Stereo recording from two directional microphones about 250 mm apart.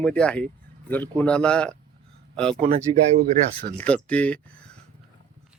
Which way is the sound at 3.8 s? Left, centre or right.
Centre.